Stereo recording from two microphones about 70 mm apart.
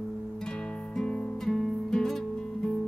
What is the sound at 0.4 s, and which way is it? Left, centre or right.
Music, centre.